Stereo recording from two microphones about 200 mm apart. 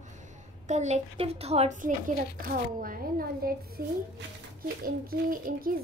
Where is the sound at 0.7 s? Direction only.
35° right (ahead or behind).